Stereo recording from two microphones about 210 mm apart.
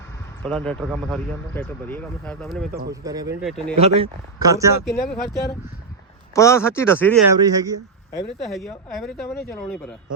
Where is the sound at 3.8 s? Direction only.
30° right (ahead or behind).